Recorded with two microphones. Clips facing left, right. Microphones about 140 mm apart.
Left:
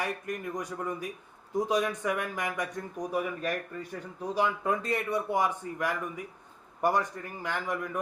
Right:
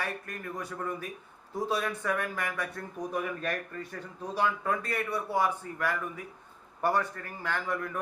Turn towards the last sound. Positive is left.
turn(degrees=15)  # may be behind; listen again after turning